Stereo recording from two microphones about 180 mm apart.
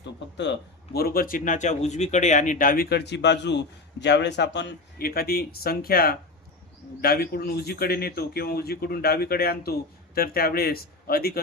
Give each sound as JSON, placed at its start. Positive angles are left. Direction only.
{"t": 0.9, "sound": "a man's voice", "side_deg": 55}